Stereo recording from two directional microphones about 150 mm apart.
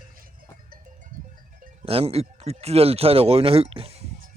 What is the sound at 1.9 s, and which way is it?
Speech, 40° right (ahead or behind).